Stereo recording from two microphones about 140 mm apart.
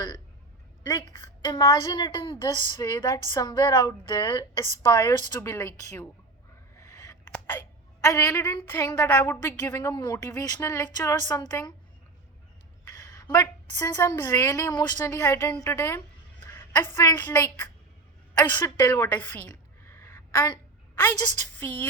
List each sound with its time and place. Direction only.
0.9 s a woman's voice: 25° left (ahead or behind)
6.7 s a sound: 25° left (ahead or behind)
7.3 s whispering: 15° left (ahead or behind)
8.0 s a woman's voice: 20° left (ahead or behind)
13.0 s a woman's voice: 25° left (ahead or behind)
19.5 s a sound: 20° left (ahead or behind)
20.9 s a woman's voice: 20° left (ahead or behind)